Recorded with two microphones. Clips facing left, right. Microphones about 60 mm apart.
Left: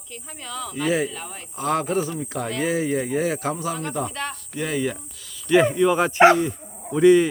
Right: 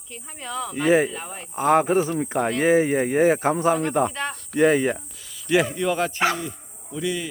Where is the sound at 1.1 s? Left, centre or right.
Centre; by 4.9 s right.